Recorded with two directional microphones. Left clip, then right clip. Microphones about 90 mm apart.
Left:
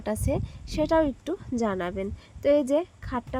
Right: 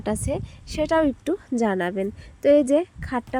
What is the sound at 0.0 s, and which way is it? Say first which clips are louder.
A woman's voice: right 2 dB; 50° right (ahead or behind).